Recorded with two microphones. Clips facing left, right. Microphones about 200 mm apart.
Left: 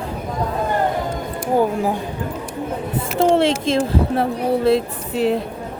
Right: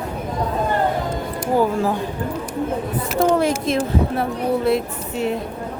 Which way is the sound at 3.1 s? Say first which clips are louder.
Left 2 dB; 30° left (ahead or behind).